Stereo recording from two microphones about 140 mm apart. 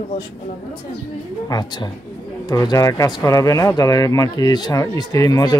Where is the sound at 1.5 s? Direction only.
30° left (ahead or behind).